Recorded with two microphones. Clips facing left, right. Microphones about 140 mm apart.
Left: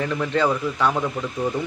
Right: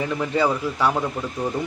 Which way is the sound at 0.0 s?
10° right (ahead or behind).